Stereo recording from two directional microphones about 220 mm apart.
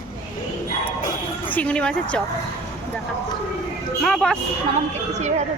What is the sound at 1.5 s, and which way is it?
Speech, 5° left (ahead or behind).